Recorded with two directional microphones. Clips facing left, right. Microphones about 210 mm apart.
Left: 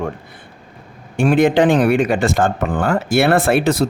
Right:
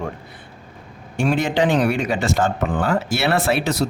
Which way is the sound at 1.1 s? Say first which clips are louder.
Left 6 dB; 55° left (ahead or behind).